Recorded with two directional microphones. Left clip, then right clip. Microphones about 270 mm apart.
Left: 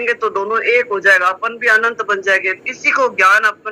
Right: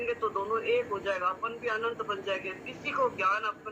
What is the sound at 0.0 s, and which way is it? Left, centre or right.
A man's voice, left.